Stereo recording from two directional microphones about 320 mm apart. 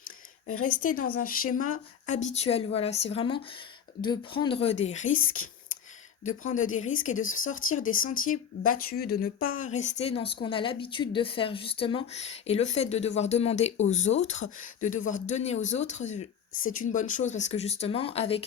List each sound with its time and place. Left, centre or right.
0.8 s a woman's voice: left
6.2 s speech: left